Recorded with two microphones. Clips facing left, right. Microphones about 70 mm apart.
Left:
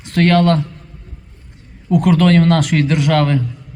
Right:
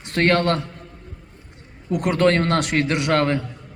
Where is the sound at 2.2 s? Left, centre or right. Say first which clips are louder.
Left 5 dB; right.